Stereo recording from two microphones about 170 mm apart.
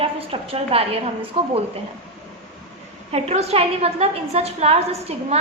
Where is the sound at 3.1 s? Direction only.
40° right (ahead or behind).